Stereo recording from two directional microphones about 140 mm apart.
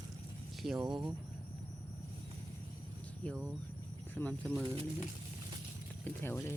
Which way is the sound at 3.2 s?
10° left (ahead or behind).